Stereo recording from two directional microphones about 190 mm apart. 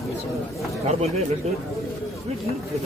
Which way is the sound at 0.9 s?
35° right (ahead or behind).